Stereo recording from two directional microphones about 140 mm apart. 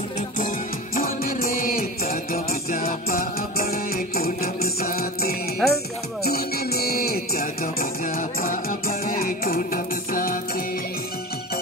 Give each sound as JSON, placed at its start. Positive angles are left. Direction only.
{"t": 0.9, "sound": "music", "side_deg": 85}
{"t": 5.6, "sound": "music", "side_deg": 5}
{"t": 6.2, "sound": "music", "side_deg": 90}